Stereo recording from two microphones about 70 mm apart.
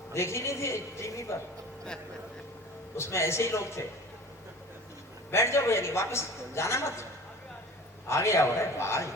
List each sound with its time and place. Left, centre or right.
0.1 s a man's voice: left
2.9 s a man's voice: left
5.3 s a man's voice: left
8.0 s a man's voice: left